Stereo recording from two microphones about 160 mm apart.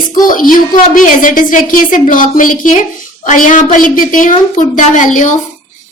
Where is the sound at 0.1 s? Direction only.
60° left (ahead or behind).